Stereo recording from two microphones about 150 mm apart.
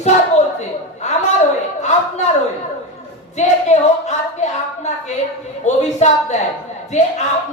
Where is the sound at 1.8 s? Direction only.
50° left (ahead or behind).